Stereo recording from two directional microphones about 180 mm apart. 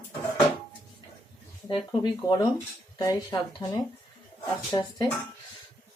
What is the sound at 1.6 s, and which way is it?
Speech, 25° left (ahead or behind).